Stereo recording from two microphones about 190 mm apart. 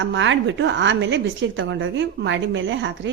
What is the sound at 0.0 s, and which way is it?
A woman's voice, 80° right.